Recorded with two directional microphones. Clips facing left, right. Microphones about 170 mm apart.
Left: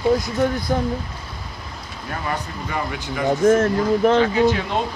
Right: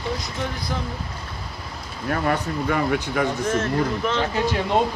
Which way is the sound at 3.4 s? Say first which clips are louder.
Left 6 dB; 55° left (ahead or behind).